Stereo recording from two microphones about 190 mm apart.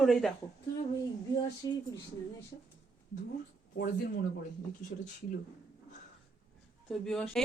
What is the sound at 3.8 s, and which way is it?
Speech, 45° left (ahead or behind).